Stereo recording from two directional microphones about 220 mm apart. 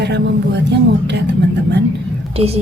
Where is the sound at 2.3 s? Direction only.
25° right (ahead or behind).